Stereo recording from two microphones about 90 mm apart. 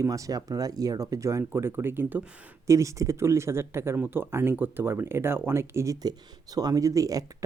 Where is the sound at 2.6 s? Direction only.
35° right (ahead or behind).